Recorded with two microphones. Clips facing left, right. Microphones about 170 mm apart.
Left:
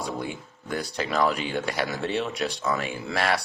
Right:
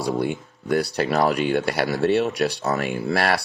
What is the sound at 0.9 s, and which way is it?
Speech, 40° right (ahead or behind).